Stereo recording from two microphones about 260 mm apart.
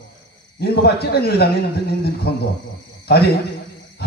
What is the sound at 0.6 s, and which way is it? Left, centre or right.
A man's voice, left.